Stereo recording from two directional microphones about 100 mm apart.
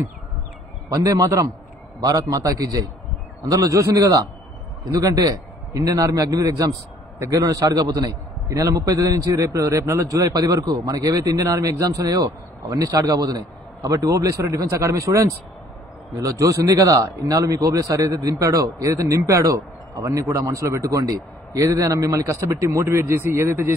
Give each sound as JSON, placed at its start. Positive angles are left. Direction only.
{"t": 0.8, "sound": "a man's voice", "side_deg": -35}